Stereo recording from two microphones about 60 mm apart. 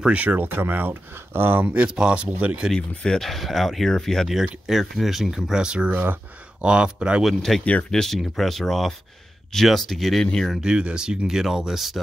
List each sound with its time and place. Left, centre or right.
0.0 s speech: right
1.7 s speech: centre
2.7 s speech: centre
4.3 s speech: centre
7.2 s speech: centre
10.6 s speech: centre